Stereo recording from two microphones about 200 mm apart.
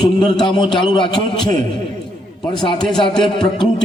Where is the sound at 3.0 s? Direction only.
25° left (ahead or behind).